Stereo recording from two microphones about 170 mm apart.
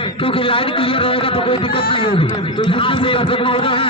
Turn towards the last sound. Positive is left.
turn(degrees=30)  # may be behind; listen again after turning